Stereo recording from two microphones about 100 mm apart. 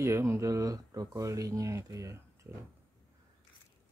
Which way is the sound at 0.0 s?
30° right (ahead or behind).